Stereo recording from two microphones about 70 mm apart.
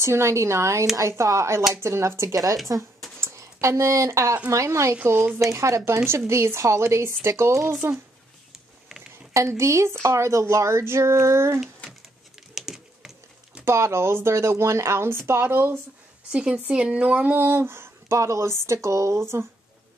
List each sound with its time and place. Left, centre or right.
0.0 s speech: right
5.1 s speech: right
5.4 s speech: right
9.3 s speech: right
12.5 s typing: centre
13.7 s speech: right
16.3 s speech: centre; by 19.4 s right